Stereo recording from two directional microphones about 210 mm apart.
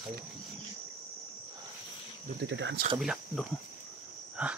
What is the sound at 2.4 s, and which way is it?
Speech, 60° right (ahead or behind).